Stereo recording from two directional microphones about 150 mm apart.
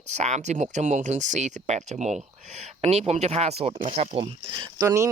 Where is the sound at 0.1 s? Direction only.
50° right (ahead or behind).